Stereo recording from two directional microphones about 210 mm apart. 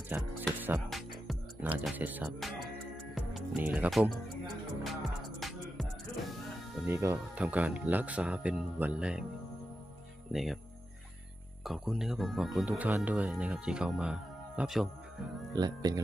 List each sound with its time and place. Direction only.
0.1 s speech: 10° right (ahead or behind)
0.6 s music: 5° right (ahead or behind)
1.9 s speech: 10° right (ahead or behind)
4.8 s music: centre (ahead or behind)
6.9 s speech: 15° right (ahead or behind)
10.3 s speech: centre (ahead or behind)
11.6 s speech: centre (ahead or behind)
15.5 s speech: 20° right (ahead or behind)